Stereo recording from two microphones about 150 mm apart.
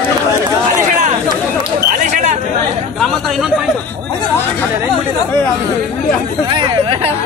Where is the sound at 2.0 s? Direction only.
50° right (ahead or behind).